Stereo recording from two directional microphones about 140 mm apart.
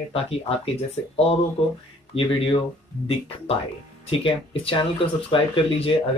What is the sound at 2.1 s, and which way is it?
Speech, 40° left (ahead or behind).